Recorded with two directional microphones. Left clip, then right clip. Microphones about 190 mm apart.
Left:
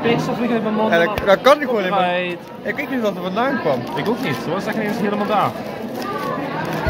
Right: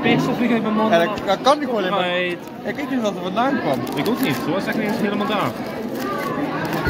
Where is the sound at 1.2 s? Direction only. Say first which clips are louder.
Left 4 dB; 35° left (ahead or behind).